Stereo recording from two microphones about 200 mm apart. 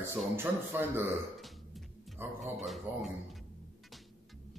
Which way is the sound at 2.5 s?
Centre (ahead or behind).